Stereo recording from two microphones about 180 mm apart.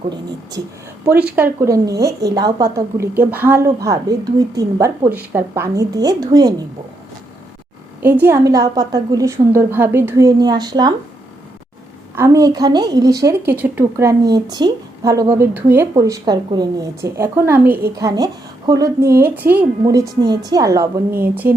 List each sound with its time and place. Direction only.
1.0 s a woman's voice: 10° right (ahead or behind)
8.0 s a woman's voice: 10° right (ahead or behind)
12.1 s a woman's voice: 15° right (ahead or behind)
18.0 s a woman's voice: 20° right (ahead or behind)